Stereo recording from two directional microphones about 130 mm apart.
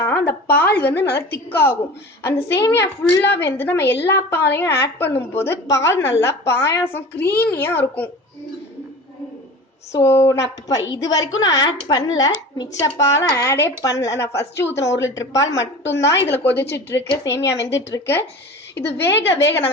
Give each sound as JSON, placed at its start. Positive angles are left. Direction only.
{"t": 0.0, "sound": "a woman's voice", "side_deg": 15}
{"t": 9.9, "sound": "a woman's voice", "side_deg": 20}